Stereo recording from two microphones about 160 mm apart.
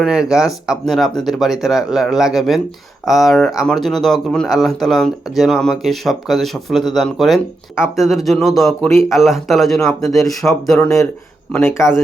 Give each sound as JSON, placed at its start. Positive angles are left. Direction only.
{"t": 0.0, "sound": "speech", "side_deg": -5}
{"t": 11.5, "sound": "speech", "side_deg": 15}